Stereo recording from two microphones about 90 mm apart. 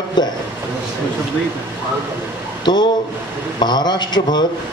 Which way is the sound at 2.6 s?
55° left (ahead or behind).